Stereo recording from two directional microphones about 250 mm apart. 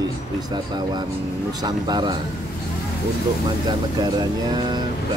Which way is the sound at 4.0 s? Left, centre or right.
Centre.